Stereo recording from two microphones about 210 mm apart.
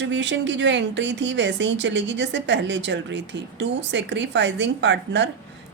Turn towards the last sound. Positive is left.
turn(degrees=-55)  # may be behind; listen again after turning